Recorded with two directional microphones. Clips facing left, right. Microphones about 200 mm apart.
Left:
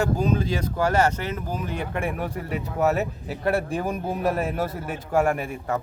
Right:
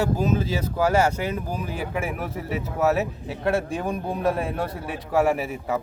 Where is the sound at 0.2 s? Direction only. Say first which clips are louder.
Even; 5° right (ahead or behind).